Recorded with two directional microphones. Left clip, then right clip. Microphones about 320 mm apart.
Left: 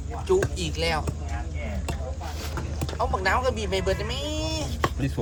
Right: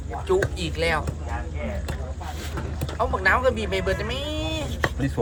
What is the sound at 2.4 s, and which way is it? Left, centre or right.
Vehicle, centre.